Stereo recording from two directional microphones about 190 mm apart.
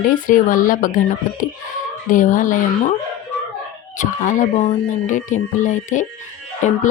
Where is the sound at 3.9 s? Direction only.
40° left (ahead or behind).